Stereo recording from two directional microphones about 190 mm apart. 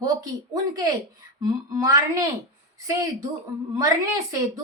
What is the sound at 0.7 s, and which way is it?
A woman's voice, 20° right (ahead or behind).